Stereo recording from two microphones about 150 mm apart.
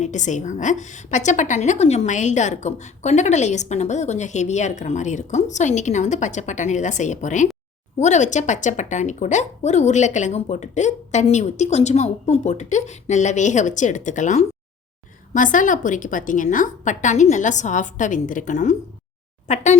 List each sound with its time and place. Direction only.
0.0 s a woman's voice: 55° left (ahead or behind)